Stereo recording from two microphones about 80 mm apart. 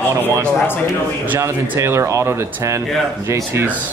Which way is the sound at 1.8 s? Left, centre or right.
Right.